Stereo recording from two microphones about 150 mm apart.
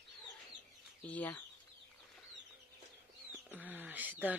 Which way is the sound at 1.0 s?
10° left (ahead or behind).